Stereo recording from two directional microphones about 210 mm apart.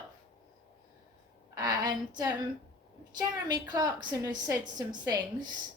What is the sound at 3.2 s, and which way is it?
Speech, 20° right (ahead or behind).